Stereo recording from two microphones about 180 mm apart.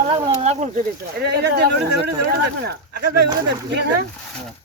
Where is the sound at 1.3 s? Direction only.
65° right (ahead or behind).